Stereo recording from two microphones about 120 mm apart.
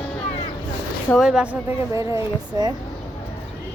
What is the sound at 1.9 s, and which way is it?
Speech, 25° right (ahead or behind).